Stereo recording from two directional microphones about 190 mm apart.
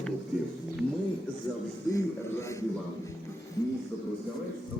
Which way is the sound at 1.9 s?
15° left (ahead or behind).